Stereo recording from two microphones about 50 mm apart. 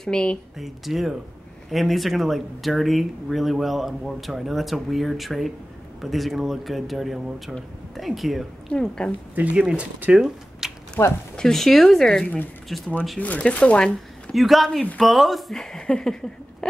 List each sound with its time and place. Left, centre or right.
0.0 s speech: centre
0.6 s speech: centre
8.7 s speech: centre
9.3 s speech: right
10.1 s speech: centre
11.0 s speech: left
11.3 s speech: centre
13.2 s speech: left
14.3 s speech: centre
15.5 s speech: centre